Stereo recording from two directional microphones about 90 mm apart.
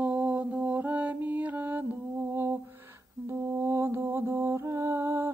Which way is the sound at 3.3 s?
25° right (ahead or behind).